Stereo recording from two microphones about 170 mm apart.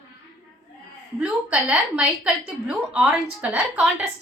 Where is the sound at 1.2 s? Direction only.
10° right (ahead or behind).